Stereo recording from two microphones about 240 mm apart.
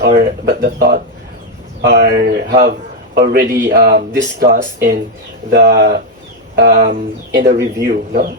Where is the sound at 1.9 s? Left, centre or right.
Right.